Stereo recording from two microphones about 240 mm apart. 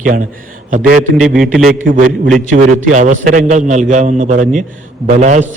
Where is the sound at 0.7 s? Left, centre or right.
Right.